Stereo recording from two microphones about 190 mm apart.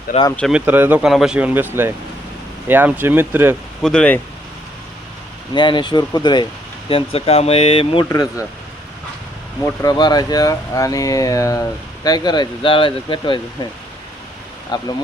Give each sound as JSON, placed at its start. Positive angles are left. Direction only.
{"t": 0.3, "sound": "speech", "side_deg": 0}
{"t": 3.8, "sound": "speech", "side_deg": 5}
{"t": 5.5, "sound": "speech", "side_deg": 25}
{"t": 8.1, "sound": "speech", "side_deg": 20}
{"t": 9.8, "sound": "speech", "side_deg": 20}
{"t": 14.7, "sound": "speech", "side_deg": 20}